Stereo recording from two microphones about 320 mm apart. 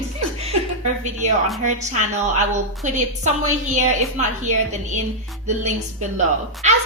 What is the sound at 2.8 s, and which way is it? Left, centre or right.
A woman's voice, right.